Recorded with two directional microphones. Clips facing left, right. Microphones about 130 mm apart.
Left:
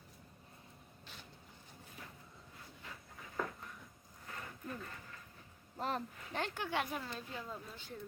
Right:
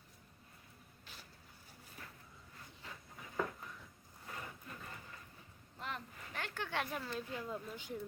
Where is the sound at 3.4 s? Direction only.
5° right (ahead or behind).